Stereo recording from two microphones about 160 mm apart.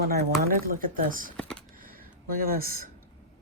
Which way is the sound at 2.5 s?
65° right (ahead or behind).